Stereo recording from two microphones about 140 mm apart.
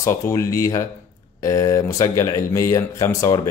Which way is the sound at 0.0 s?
20° left (ahead or behind).